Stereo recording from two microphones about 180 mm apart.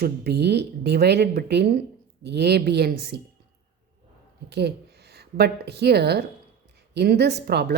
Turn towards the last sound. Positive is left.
turn(degrees=-65)  # may be behind; listen again after turning